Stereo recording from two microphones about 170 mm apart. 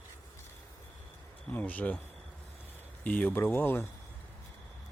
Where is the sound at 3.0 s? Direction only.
10° left (ahead or behind).